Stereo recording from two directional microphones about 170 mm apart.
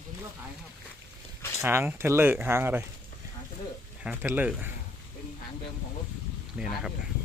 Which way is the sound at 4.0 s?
10° right (ahead or behind).